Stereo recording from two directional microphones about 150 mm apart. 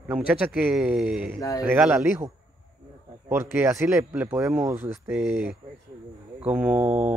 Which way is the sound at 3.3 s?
15° right (ahead or behind).